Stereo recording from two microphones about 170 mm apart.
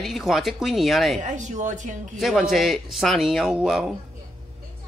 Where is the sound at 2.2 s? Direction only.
Centre (ahead or behind).